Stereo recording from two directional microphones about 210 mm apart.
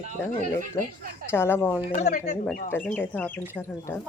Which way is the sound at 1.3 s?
10° left (ahead or behind).